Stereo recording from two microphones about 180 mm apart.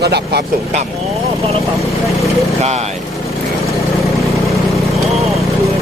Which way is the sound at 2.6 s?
35° right (ahead or behind).